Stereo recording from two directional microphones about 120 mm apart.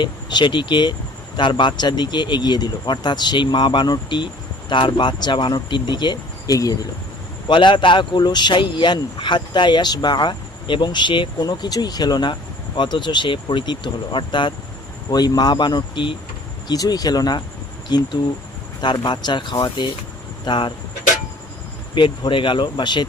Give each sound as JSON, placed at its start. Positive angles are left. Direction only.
{"t": 0.0, "sound": "speech", "side_deg": 40}
{"t": 7.4, "sound": "speech", "side_deg": 40}
{"t": 21.9, "sound": "speech", "side_deg": 40}